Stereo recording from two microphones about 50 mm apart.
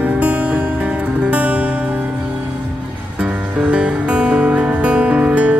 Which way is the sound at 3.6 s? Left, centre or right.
Right.